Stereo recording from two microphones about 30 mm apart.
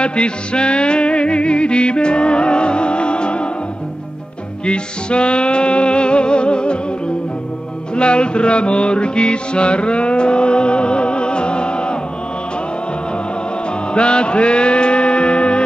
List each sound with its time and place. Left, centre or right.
0.0 s music: left
4.6 s music: left
7.9 s music: left
13.9 s music: left